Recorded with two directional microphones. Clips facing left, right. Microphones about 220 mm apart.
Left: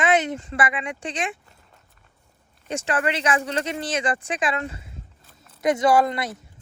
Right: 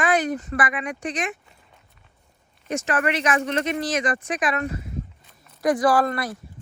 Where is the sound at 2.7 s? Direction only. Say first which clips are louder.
Right 1 dB; 30° left (ahead or behind).